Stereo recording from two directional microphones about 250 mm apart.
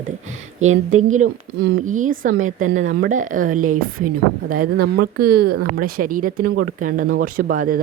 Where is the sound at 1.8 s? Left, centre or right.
Right.